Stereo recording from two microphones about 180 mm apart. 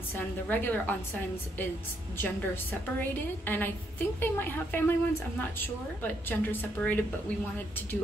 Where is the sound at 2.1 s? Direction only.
10° left (ahead or behind).